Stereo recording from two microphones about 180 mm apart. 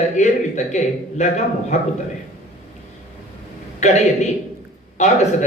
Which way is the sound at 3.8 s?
40° left (ahead or behind).